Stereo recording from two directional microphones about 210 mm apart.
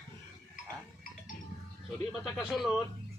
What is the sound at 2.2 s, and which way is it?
Speech, centre (ahead or behind).